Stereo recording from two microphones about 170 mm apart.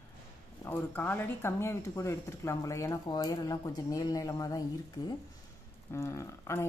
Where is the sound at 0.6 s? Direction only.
10° left (ahead or behind).